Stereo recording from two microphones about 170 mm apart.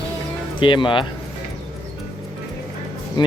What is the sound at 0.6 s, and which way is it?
Speech, 30° left (ahead or behind).